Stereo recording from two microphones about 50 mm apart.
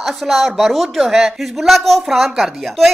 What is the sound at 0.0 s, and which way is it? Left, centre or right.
Speech, centre.